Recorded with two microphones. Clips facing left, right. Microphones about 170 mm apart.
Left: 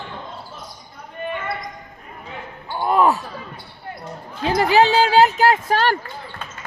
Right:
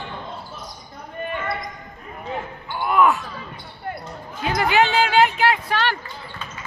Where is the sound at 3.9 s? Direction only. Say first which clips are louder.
Right 4 dB; 65° right (ahead or behind).